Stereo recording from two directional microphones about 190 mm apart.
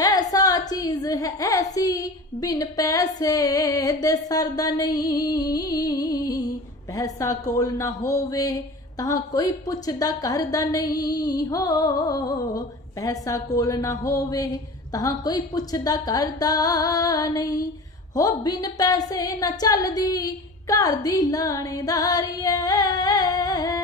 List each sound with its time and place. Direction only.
0.0 s a woman's voice: 20° left (ahead or behind)